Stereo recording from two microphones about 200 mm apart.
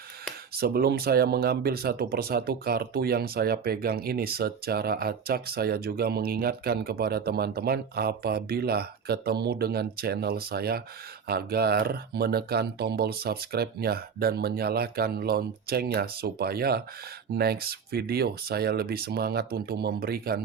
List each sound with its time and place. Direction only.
0.6 s speech: 50° right (ahead or behind)